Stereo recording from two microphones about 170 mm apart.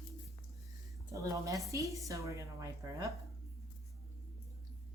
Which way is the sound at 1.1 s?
20° right (ahead or behind).